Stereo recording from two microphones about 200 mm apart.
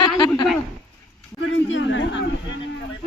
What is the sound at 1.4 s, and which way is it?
Speech, 70° left (ahead or behind).